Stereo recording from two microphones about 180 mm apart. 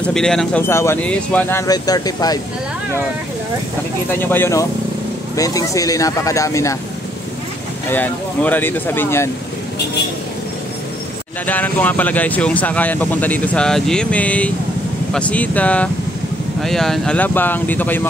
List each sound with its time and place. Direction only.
0.0 s speech: 5° left (ahead or behind); by 2.4 s 20° left (ahead or behind)
4.1 s speech: 10° left (ahead or behind)
7.9 s speech: 10° left (ahead or behind)
11.4 s speech: 10° left (ahead or behind)